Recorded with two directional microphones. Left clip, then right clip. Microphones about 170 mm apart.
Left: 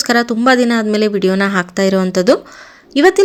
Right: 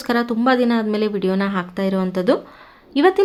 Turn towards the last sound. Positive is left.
turn(degrees=15)  # may be behind; listen again after turning